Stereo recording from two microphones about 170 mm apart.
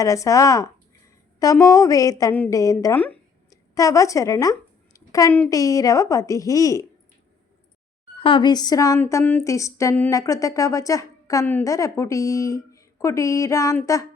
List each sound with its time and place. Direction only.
0.0 s a woman's voice: 20° left (ahead or behind)
4.9 s a sound: 20° left (ahead or behind)
5.5 s speech: 20° left (ahead or behind)
8.2 s speech: 30° left (ahead or behind)